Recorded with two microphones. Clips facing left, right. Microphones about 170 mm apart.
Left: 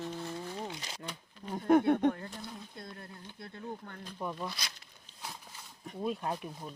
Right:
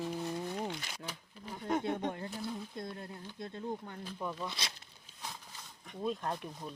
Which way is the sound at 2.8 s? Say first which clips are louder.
Right 4 dB; 20° right (ahead or behind).